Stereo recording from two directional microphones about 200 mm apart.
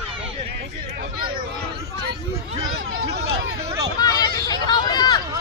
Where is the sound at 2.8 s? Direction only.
55° right (ahead or behind).